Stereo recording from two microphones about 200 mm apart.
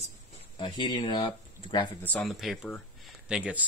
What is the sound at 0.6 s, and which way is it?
Speech, 25° left (ahead or behind).